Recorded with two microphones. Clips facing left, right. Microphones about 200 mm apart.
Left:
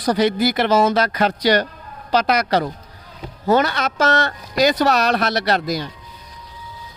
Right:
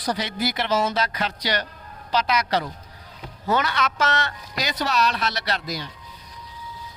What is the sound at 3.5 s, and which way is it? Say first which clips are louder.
Speech: left 6 dB; 40° left (ahead or behind).